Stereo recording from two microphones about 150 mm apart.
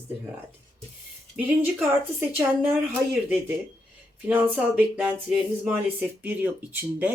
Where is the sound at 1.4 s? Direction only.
10° right (ahead or behind).